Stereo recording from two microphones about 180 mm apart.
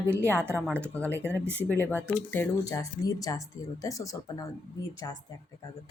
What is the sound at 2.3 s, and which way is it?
Speech, 15° left (ahead or behind).